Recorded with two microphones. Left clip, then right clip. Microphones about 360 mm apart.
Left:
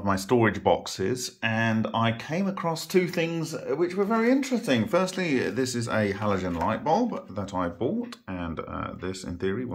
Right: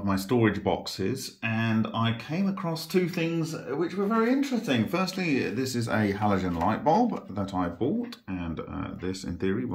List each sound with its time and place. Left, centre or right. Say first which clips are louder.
0.0 s speech: left 2 dB; centre
9.0 s speech: right 2 dB; centre